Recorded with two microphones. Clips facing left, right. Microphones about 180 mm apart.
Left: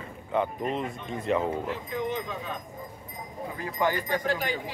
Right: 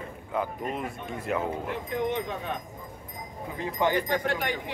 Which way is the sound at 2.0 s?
60° right (ahead or behind).